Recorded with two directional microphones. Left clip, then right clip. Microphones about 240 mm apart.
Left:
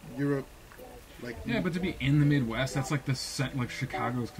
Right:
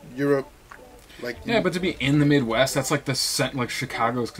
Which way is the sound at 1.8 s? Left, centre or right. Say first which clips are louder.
Right 8 dB; centre.